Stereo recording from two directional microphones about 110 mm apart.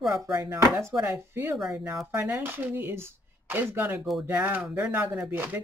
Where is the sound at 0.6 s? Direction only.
30° right (ahead or behind).